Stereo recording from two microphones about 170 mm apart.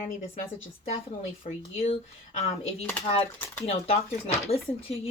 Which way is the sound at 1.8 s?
35° left (ahead or behind).